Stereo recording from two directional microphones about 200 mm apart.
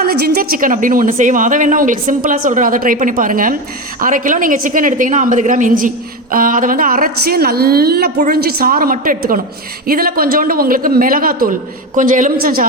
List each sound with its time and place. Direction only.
0.0 s a woman's voice: 50° right (ahead or behind)